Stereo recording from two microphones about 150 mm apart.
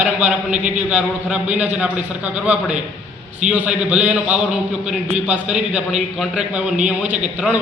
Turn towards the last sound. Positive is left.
turn(degrees=-10)  # may be behind; listen again after turning